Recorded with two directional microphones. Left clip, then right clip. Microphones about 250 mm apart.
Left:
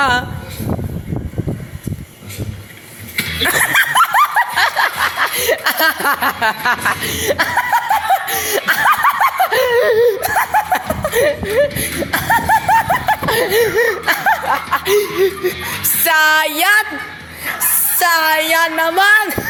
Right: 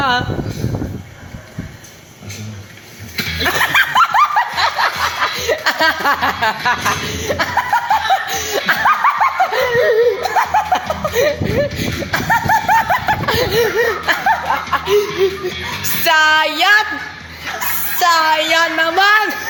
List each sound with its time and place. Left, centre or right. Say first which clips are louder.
0.0 s a sound: left 1 dB; left
3.4 s snicker: even; left
5.2 s chuckle: even; left
10.2 s a sound: even; left; by 13.6 s centre
13.6 s chuckle: left 1 dB; left
18.0 s speech: right 1 dB; left